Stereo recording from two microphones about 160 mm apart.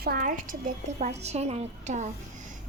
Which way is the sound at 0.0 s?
60° right (ahead or behind).